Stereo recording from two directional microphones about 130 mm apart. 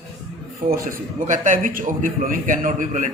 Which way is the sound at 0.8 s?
85° right.